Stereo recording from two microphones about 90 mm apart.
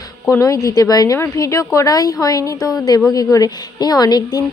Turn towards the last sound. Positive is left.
turn(degrees=45)  # may be behind; listen again after turning